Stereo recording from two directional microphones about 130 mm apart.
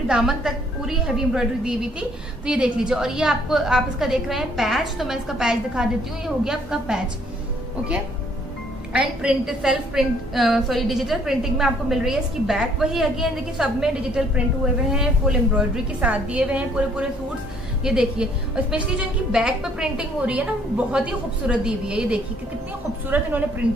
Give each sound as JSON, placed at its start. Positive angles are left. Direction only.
{"t": 0.1, "sound": "a woman's voice", "side_deg": -5}
{"t": 8.9, "sound": "a woman's voice", "side_deg": -5}